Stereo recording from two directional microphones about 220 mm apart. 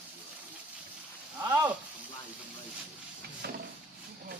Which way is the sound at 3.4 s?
45° right (ahead or behind).